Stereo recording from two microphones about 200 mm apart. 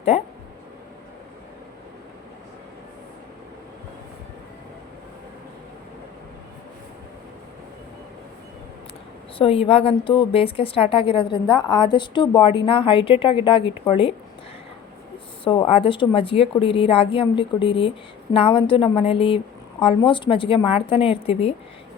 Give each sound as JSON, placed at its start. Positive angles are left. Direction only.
{"t": 0.1, "sound": "a woman's voice", "side_deg": 30}
{"t": 9.4, "sound": "a woman's voice", "side_deg": 30}
{"t": 15.4, "sound": "a woman's voice", "side_deg": 25}